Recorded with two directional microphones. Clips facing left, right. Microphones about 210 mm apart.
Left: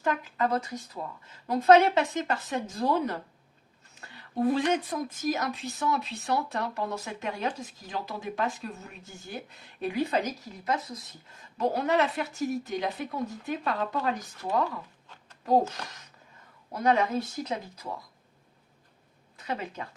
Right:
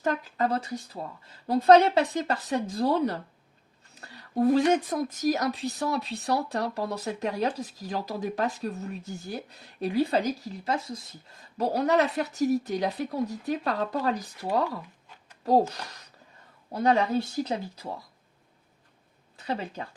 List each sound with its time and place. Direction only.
0.0 s a woman's voice: 35° right (ahead or behind)
16.7 s a woman's voice: 30° right (ahead or behind)
19.4 s speech: 30° right (ahead or behind)